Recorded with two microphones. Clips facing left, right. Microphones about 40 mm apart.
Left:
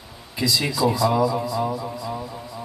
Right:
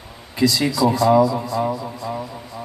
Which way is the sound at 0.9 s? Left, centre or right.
Right.